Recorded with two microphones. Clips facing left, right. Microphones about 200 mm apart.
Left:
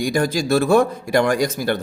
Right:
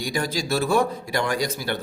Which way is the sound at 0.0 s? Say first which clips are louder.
Left 7 dB; 50° left (ahead or behind).